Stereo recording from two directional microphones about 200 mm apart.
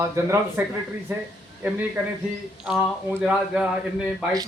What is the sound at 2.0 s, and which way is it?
Speech, 10° right (ahead or behind).